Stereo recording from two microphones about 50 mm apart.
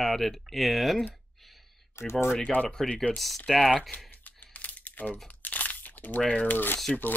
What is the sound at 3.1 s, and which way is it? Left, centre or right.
Speech, centre.